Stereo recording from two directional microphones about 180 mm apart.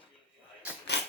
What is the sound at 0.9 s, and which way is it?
Rodents, 70° left (ahead or behind).